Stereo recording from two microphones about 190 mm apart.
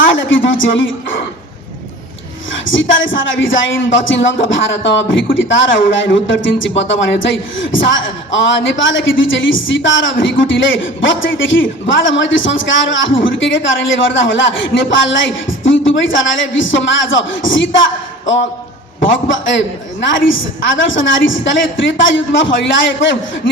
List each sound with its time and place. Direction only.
0.0 s a sound: 80° left
2.5 s a woman's voice: 80° left
19.0 s a woman's voice: 80° left
20.1 s a woman's voice: 90° left